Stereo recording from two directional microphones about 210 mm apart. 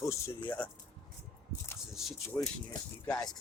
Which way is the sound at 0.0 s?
15° left (ahead or behind).